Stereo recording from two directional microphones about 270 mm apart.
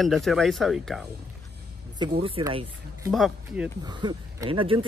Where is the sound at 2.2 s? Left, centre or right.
Centre.